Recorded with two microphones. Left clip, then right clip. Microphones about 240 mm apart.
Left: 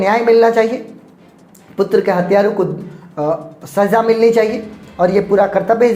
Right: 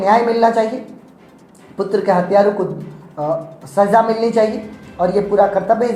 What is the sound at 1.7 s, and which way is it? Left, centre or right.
Speech, left.